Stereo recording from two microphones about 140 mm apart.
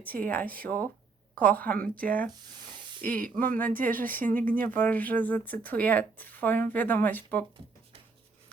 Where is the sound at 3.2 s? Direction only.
80° right.